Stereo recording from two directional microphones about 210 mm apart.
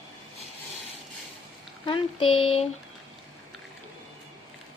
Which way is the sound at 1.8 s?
25° left (ahead or behind).